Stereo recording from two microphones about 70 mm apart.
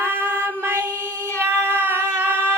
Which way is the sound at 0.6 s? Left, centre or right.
Right.